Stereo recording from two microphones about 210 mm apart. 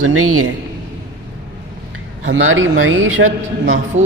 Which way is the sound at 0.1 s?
85° right.